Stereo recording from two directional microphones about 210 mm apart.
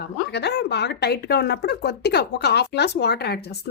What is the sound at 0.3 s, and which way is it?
Speech, 55° left (ahead or behind).